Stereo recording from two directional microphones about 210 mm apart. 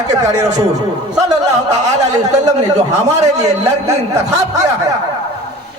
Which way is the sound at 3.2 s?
30° right (ahead or behind).